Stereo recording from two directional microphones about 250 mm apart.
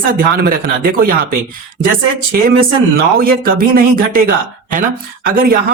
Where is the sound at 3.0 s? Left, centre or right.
Right.